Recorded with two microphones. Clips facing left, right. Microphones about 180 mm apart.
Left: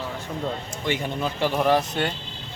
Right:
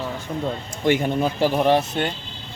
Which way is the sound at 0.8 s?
50° right (ahead or behind).